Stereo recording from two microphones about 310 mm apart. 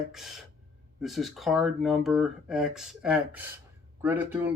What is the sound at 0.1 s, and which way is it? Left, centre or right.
Speech, centre.